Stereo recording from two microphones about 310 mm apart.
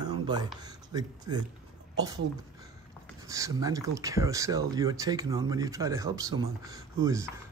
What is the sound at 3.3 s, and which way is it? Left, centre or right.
Speech, centre.